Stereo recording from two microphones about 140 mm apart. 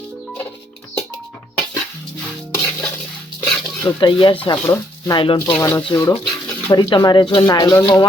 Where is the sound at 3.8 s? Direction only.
35° left (ahead or behind).